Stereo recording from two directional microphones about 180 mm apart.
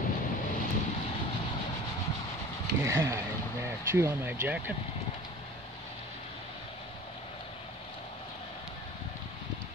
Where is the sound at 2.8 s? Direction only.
15° right (ahead or behind).